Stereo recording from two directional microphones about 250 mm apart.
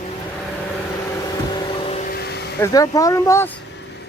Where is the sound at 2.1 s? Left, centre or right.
Left.